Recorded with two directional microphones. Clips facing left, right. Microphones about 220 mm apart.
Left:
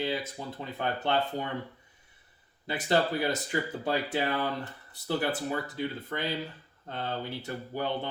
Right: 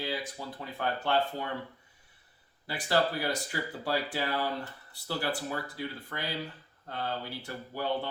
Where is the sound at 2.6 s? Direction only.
20° left (ahead or behind).